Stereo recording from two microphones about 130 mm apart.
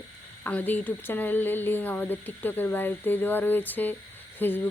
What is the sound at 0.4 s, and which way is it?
Speech, 15° left (ahead or behind).